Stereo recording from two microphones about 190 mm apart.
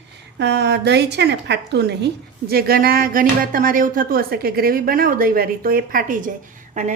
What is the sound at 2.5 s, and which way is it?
Speech, 55° right (ahead or behind).